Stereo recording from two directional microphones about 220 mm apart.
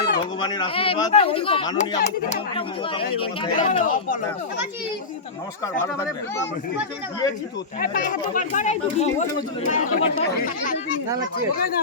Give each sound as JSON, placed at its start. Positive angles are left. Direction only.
{"t": 0.3, "sound": "a man's voice", "side_deg": 20}
{"t": 5.8, "sound": "speech", "side_deg": 15}
{"t": 7.8, "sound": "speech", "side_deg": 40}